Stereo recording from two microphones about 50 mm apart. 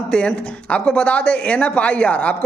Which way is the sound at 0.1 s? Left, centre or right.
Left.